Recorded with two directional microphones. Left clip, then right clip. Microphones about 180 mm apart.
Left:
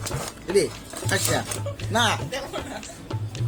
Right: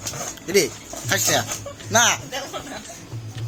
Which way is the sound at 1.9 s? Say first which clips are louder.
Right 4 dB; 15° right (ahead or behind).